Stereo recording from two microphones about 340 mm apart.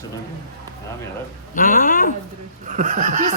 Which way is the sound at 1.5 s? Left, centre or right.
Left.